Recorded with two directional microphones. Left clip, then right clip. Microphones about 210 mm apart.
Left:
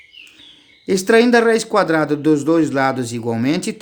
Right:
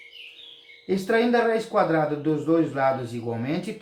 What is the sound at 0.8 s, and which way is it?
Speech, 50° left (ahead or behind).